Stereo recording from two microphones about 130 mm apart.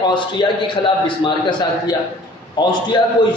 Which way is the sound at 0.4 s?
35° left (ahead or behind).